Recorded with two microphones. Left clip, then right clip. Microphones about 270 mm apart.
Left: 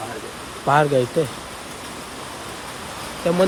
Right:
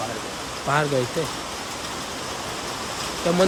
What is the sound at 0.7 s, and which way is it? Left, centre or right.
Speech, centre.